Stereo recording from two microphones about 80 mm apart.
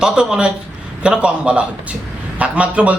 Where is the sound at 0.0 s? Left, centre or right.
Centre.